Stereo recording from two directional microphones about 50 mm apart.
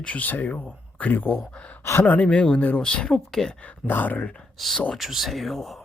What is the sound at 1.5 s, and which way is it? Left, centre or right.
Speech, left.